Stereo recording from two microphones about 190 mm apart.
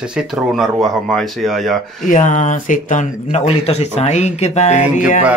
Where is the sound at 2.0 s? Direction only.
40° left (ahead or behind).